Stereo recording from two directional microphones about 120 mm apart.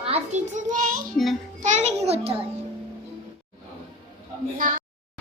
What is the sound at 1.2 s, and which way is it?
Child singing, 5° left (ahead or behind).